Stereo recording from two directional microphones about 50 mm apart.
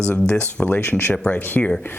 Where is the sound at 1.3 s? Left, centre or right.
Left.